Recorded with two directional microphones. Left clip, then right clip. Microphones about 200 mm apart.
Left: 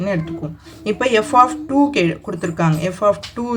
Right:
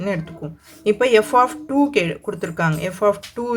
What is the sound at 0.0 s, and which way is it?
Speech, 25° right (ahead or behind).